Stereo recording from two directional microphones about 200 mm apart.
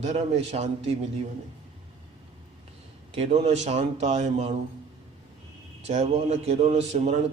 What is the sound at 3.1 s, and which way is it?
A man's voice, 30° right (ahead or behind).